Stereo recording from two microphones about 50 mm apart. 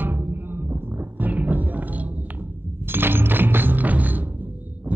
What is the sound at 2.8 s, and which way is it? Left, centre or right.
Music, right.